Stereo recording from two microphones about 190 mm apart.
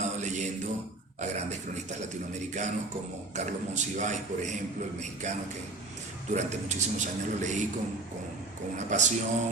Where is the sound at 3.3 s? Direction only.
40° right (ahead or behind).